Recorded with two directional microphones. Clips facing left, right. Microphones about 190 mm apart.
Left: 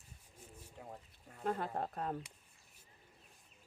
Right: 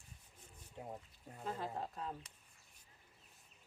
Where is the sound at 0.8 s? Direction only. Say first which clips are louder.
Right 3 dB; 25° right (ahead or behind).